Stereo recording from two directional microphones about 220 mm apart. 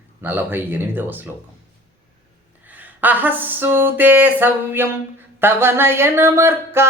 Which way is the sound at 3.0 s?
10° right (ahead or behind).